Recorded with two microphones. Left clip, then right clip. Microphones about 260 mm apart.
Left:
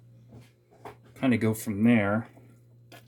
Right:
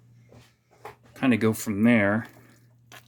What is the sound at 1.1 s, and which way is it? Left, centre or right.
Speech, right.